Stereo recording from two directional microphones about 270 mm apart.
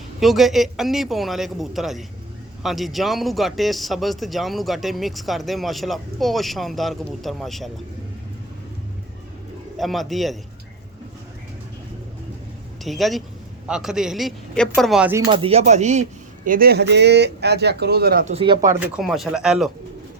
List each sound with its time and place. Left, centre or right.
0.2 s speech: centre
9.7 s speech: centre
12.8 s speech: centre
15.3 s a man's voice: right; by 19.7 s centre